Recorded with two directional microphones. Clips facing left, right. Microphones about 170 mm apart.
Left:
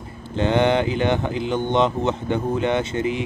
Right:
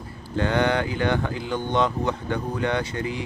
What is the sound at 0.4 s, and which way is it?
Speech, 20° left (ahead or behind).